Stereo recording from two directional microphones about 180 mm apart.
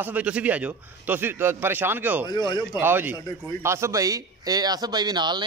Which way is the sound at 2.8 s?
10° right (ahead or behind).